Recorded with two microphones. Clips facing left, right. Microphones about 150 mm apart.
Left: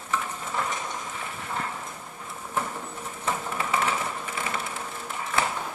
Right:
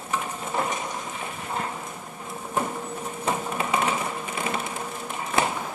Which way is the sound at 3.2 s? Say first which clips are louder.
Right 2 dB; 15° right (ahead or behind).